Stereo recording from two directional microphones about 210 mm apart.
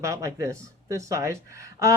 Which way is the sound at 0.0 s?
15° right (ahead or behind).